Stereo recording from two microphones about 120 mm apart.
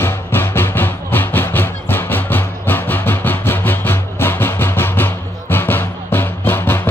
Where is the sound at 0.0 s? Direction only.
20° left (ahead or behind).